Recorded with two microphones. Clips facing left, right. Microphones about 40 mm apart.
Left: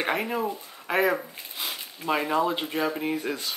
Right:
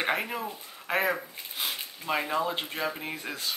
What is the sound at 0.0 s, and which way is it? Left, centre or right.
Speech, centre.